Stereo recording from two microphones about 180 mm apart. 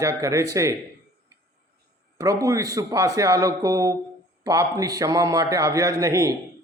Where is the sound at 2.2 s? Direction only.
20° right (ahead or behind).